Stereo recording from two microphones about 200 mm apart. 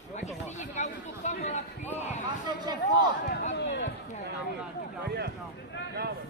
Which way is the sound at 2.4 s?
20° right (ahead or behind).